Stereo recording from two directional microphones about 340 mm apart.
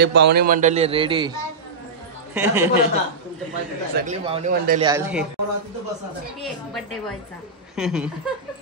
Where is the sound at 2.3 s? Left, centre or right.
Centre.